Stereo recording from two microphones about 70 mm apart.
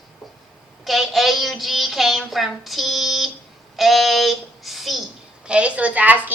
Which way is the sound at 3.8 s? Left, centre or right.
Centre.